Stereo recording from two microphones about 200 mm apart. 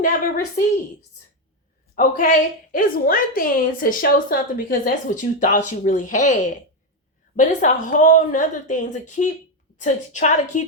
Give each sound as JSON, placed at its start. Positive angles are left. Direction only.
{"t": 0.0, "sound": "a woman's voice", "side_deg": 45}
{"t": 2.0, "sound": "a woman's voice", "side_deg": 40}
{"t": 7.3, "sound": "a woman's voice", "side_deg": 40}